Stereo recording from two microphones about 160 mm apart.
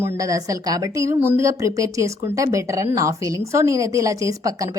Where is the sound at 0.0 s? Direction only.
20° right (ahead or behind).